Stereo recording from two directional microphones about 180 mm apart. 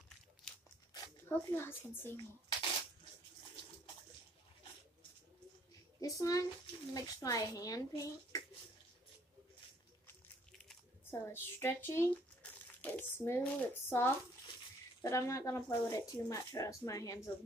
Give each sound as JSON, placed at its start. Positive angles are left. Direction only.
{"t": 0.5, "sound": "tearing", "side_deg": 5}
{"t": 0.9, "sound": "speech", "side_deg": 20}
{"t": 5.9, "sound": "speech", "side_deg": 20}
{"t": 11.1, "sound": "speech", "side_deg": 15}